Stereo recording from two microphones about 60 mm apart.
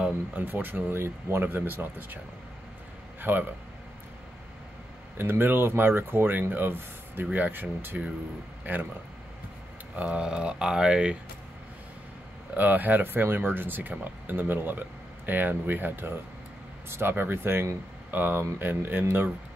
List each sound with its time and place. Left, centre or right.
0.3 s speech: right
3.2 s a man's voice: right
5.1 s speech: right
9.9 s speech: centre
12.5 s speech: right